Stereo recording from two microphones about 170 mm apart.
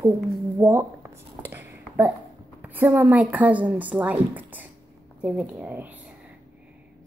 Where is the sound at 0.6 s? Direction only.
15° right (ahead or behind).